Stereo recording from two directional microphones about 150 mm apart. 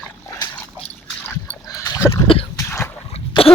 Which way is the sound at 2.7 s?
15° left (ahead or behind).